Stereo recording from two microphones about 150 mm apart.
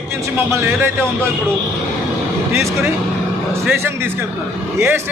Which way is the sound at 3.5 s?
15° right (ahead or behind).